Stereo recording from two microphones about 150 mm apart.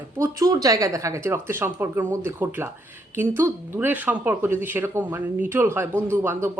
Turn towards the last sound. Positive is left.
turn(degrees=-15)  # may be behind; listen again after turning